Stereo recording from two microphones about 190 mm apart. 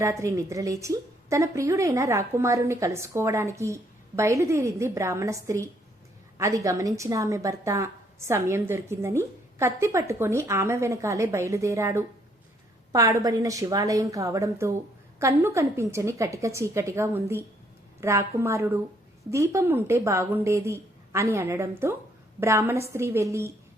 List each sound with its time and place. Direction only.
0.0 s a woman's voice: 15° right (ahead or behind)